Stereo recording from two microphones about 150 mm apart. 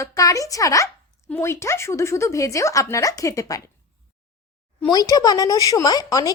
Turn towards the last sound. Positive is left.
turn(degrees=25)  # may be behind; listen again after turning